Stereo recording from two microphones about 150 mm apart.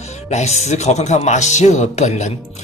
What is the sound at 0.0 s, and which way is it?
Speech, 50° left (ahead or behind).